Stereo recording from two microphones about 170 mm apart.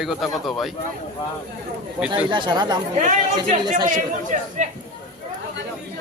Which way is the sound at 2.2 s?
25° right (ahead or behind).